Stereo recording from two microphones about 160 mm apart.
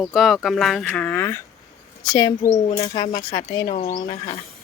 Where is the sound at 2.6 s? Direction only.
45° left (ahead or behind).